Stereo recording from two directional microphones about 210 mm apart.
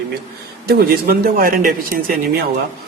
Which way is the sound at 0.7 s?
45° right (ahead or behind).